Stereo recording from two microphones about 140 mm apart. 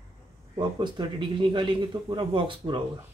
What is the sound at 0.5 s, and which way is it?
Speech, 35° right (ahead or behind).